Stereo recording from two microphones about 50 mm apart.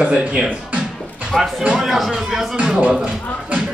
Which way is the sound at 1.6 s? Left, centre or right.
Centre.